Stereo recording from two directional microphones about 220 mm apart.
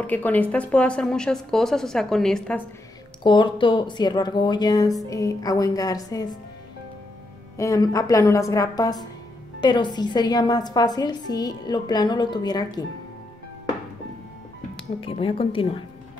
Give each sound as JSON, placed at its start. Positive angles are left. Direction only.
{"t": 0.0, "sound": "speech", "side_deg": 5}
{"t": 3.3, "sound": "a woman's voice", "side_deg": 20}
{"t": 7.5, "sound": "a woman's voice", "side_deg": 15}
{"t": 15.0, "sound": "a woman's voice", "side_deg": 25}